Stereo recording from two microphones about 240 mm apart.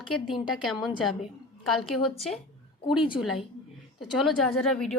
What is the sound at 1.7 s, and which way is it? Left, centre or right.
Speech, centre.